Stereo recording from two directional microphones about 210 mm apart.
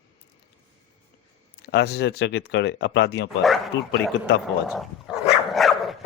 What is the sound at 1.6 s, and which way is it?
Speech, 50° left (ahead or behind).